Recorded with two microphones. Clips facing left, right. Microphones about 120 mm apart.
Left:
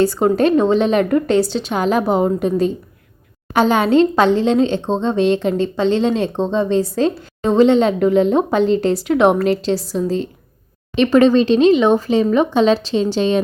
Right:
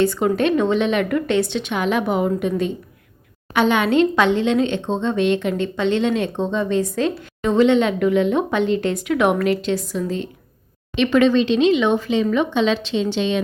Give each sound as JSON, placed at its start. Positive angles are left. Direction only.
{"t": 0.0, "sound": "a woman's voice", "side_deg": 35}